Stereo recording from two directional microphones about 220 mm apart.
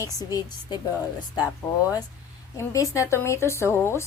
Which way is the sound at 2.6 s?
15° left (ahead or behind).